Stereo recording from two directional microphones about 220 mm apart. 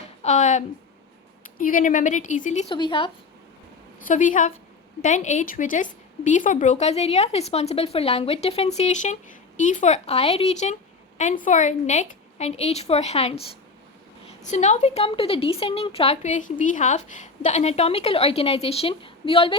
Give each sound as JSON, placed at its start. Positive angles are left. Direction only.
{"t": 0.2, "sound": "a sound", "side_deg": 35}
{"t": 1.5, "sound": "a woman's voice", "side_deg": 40}
{"t": 2.7, "sound": "a woman's voice", "side_deg": 20}
{"t": 4.0, "sound": "a woman's voice", "side_deg": 35}